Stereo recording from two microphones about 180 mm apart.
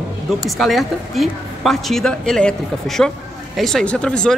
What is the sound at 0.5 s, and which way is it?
A man's voice, centre (ahead or behind).